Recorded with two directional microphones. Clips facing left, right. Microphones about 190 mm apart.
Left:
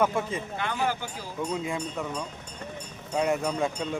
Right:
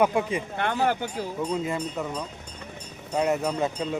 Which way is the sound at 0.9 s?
60° right (ahead or behind).